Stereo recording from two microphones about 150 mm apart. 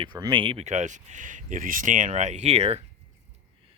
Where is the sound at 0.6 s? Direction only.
50° right (ahead or behind).